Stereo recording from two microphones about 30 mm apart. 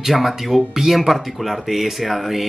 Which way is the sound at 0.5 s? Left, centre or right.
Centre.